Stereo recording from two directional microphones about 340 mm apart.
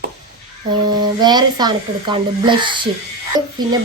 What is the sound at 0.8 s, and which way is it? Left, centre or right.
A child's voice, centre.